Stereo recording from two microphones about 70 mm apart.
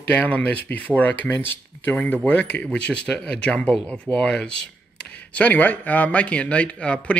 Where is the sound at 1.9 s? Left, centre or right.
Left.